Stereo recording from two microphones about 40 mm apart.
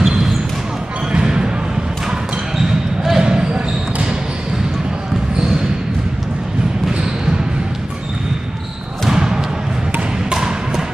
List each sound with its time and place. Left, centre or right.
0.0 s basketball bounce: centre
9.1 s basketball bounce: centre
10.3 s music: centre